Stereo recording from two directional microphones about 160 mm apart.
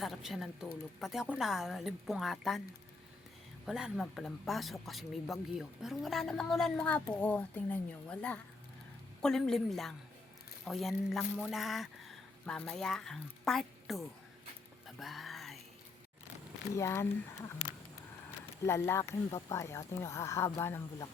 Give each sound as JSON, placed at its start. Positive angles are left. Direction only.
{"t": 0.0, "sound": "a woman's voice", "side_deg": 0}
{"t": 3.7, "sound": "speech", "side_deg": 0}
{"t": 14.8, "sound": "a sound", "side_deg": 0}
{"t": 16.7, "sound": "speech", "side_deg": 15}
{"t": 18.6, "sound": "speech", "side_deg": 15}